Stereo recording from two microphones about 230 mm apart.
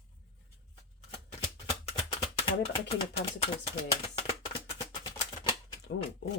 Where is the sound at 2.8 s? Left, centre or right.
Left.